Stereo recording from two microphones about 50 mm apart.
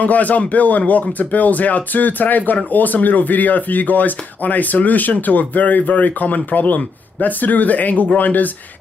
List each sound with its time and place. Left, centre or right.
0.0 s speech: left